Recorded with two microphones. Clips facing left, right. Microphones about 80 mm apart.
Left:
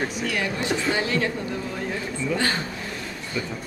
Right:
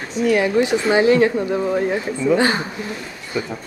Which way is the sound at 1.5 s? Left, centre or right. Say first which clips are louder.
Right 10 dB; right.